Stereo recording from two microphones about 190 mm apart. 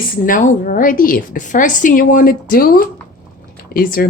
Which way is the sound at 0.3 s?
45° left (ahead or behind).